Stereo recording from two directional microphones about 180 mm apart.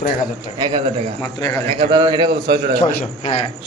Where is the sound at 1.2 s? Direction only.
20° left (ahead or behind).